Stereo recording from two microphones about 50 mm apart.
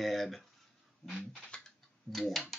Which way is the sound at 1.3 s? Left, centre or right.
Centre.